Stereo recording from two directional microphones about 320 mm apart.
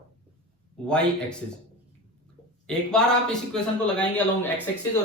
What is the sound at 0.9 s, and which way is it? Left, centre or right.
Speech, centre.